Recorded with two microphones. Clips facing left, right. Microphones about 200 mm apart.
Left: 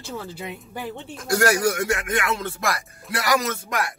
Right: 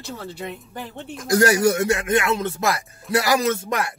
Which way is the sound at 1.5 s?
25° right (ahead or behind).